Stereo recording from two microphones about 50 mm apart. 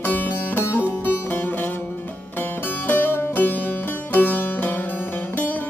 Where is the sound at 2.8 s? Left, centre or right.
Left.